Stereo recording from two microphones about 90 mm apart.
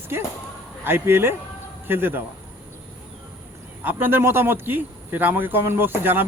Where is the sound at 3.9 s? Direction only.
25° right (ahead or behind).